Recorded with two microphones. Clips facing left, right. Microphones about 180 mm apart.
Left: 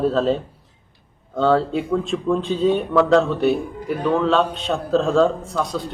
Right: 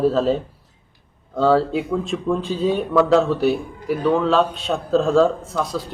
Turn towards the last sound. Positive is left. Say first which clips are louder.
# even
turn(degrees=0)  # may be behind; listen again after turning